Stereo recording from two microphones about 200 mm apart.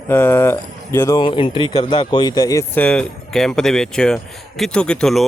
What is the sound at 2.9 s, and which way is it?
Speech, 5° left (ahead or behind).